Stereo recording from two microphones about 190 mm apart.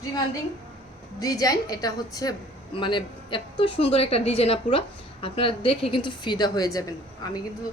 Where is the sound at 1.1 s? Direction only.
20° left (ahead or behind).